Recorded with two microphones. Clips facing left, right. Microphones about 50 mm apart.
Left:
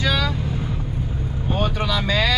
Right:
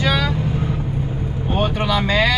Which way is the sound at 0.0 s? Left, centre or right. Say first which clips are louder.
Right 3 dB; centre.